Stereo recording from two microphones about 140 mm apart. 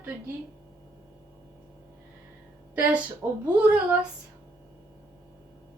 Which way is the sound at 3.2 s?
20° right (ahead or behind).